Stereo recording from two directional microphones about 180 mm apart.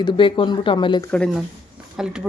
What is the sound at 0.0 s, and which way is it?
Speech, 30° left (ahead or behind).